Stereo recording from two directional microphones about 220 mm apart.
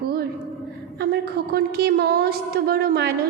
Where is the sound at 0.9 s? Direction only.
45° right (ahead or behind).